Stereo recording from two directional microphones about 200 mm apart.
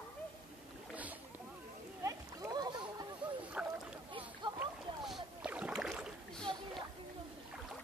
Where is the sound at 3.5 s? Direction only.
5° right (ahead or behind).